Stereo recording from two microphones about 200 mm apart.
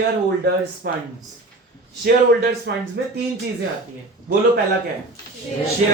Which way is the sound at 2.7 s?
60° right (ahead or behind).